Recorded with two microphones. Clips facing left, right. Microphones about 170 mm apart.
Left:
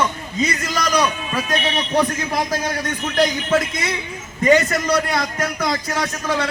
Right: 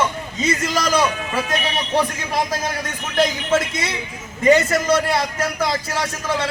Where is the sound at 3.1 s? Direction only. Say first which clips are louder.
Even; 25° right (ahead or behind).